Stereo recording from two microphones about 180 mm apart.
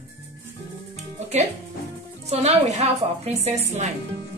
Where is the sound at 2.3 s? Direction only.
35° right (ahead or behind).